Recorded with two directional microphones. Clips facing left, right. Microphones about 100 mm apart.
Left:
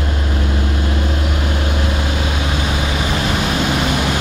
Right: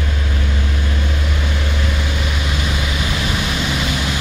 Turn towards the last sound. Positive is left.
turn(degrees=45)  # may be behind; listen again after turning